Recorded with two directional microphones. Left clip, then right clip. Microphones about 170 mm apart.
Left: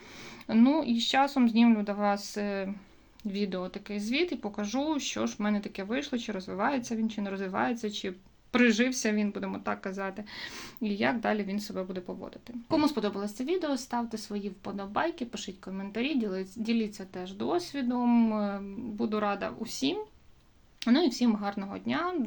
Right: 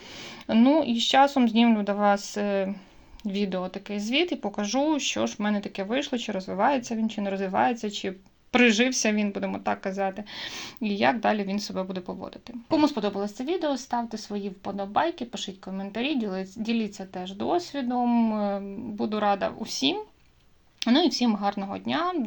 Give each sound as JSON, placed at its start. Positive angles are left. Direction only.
{"t": 0.4, "sound": "speech", "side_deg": -35}
{"t": 12.7, "sound": "speech", "side_deg": -25}